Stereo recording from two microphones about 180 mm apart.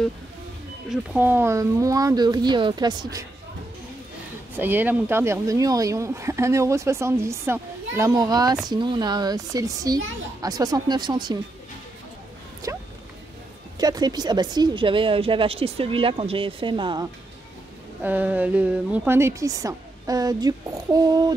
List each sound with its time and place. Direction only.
0.8 s speech: 10° right (ahead or behind)
4.6 s speech: 10° right (ahead or behind)
12.6 s a sound: 15° right (ahead or behind)
13.7 s speech: 20° right (ahead or behind)
18.0 s speech: 10° right (ahead or behind)